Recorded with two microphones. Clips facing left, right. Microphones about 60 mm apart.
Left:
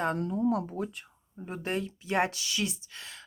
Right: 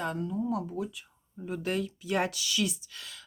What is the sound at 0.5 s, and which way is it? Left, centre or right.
Speech, left.